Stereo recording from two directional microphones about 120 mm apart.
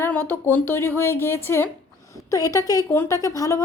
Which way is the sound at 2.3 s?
30° left (ahead or behind).